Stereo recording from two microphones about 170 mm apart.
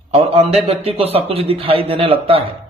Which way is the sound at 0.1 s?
35° right (ahead or behind).